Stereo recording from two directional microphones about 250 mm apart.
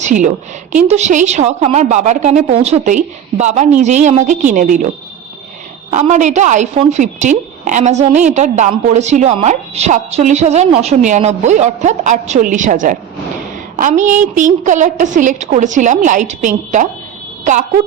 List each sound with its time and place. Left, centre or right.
0.0 s a woman's voice: right
5.9 s speech: right